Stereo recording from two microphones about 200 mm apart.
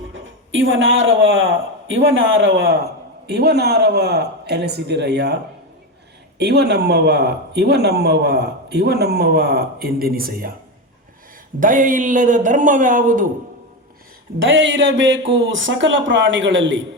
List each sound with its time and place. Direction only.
0.1 s a man's voice: 70° right (ahead or behind); by 5.4 s 55° right (ahead or behind)
6.4 s speech: 55° right (ahead or behind)
11.6 s a man's voice: 40° right (ahead or behind)
14.4 s speech: 70° right (ahead or behind)